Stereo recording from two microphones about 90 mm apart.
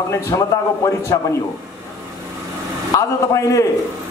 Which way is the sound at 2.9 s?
35° left (ahead or behind).